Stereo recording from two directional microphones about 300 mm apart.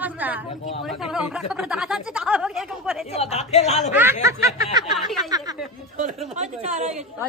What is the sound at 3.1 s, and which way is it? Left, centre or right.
Speech, left.